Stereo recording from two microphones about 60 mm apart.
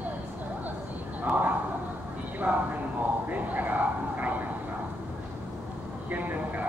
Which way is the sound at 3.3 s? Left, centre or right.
Right.